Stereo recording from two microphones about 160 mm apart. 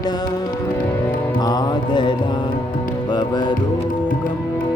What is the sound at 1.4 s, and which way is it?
Music, 25° left (ahead or behind).